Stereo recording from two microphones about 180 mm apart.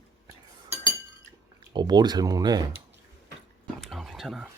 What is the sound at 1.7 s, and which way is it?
Speech, 25° right (ahead or behind).